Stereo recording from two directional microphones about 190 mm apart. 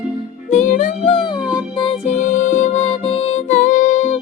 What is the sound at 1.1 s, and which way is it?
Music, 25° left (ahead or behind).